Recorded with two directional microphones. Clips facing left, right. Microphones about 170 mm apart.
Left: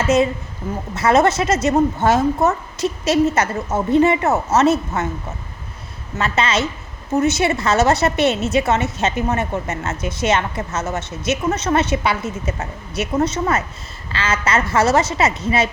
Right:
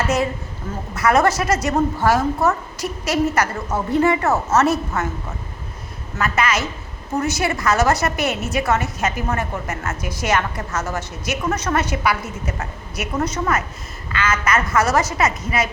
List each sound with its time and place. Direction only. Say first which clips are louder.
0.9 s a woman's voice: left 2 dB; 25° left (ahead or behind)
6.1 s a woman's voice: left 1 dB; 25° left (ahead or behind)